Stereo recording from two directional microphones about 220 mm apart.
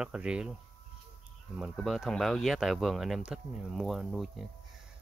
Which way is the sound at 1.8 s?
Centre (ahead or behind).